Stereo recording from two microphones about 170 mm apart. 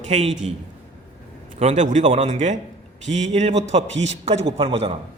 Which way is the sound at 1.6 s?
40° right (ahead or behind).